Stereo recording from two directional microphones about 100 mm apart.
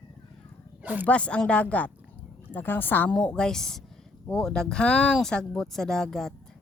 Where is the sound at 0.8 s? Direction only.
15° right (ahead or behind).